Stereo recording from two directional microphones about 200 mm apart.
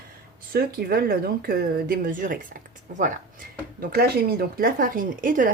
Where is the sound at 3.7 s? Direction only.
50° right (ahead or behind).